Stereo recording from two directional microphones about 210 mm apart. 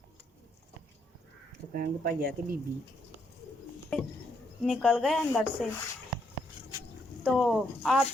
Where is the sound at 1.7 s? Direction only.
45° right (ahead or behind).